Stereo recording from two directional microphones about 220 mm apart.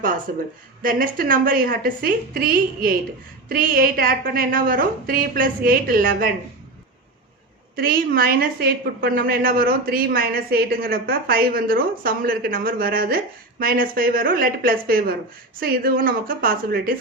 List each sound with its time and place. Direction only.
0.0 s a woman's voice: 40° right (ahead or behind)
7.8 s a woman's voice: 40° right (ahead or behind)